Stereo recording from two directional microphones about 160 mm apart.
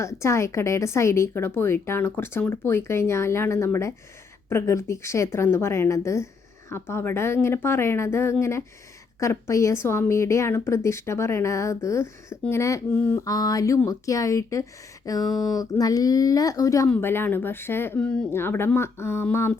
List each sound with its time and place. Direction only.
0.0 s a woman's voice: 15° left (ahead or behind)